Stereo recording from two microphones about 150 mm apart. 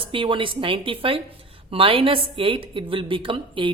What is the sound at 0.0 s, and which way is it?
Speech, 35° right (ahead or behind).